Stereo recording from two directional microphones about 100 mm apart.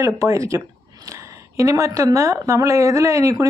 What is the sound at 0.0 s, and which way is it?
Speech, 30° right (ahead or behind).